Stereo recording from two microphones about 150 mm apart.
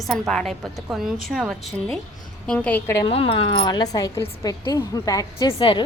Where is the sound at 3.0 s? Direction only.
35° left (ahead or behind).